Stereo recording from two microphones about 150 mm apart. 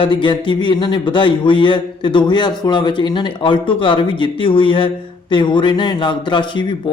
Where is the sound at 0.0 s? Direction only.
35° left (ahead or behind).